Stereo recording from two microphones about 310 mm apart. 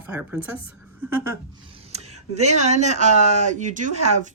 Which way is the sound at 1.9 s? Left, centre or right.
Right.